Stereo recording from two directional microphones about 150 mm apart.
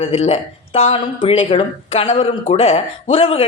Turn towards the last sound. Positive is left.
turn(degrees=40)  # may be behind; listen again after turning